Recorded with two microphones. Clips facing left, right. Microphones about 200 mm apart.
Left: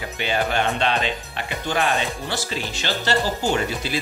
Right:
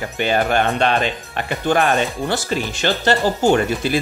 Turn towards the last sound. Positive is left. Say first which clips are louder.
# right 7 dB
turn(degrees=-55)  # may be behind; listen again after turning